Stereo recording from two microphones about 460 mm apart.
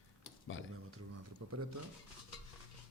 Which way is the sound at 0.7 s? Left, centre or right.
Right.